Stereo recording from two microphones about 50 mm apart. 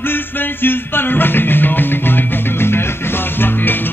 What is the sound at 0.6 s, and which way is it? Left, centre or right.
Music, left.